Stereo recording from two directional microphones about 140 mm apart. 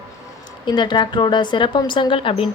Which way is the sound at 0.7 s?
35° left (ahead or behind).